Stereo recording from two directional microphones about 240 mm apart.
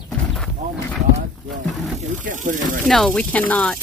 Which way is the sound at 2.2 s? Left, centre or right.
Right.